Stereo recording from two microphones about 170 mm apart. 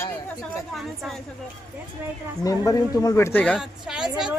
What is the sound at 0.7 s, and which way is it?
Speech, centre (ahead or behind).